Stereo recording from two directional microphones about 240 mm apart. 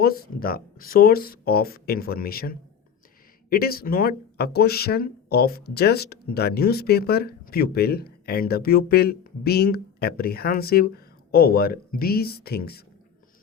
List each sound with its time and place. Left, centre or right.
0.0 s speech: left